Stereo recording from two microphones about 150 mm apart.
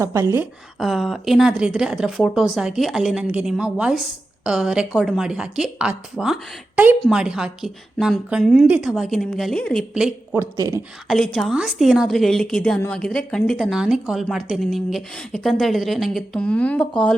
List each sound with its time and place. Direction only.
0.0 s a woman's voice: 20° right (ahead or behind)
0.8 s a woman's voice: centre (ahead or behind)
10.3 s speech: 20° right (ahead or behind)
11.1 s a woman's voice: 5° left (ahead or behind)